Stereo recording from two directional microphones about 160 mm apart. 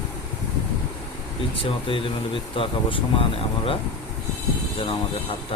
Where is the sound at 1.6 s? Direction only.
35° left (ahead or behind).